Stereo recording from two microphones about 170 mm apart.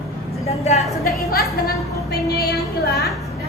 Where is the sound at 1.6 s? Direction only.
65° left (ahead or behind).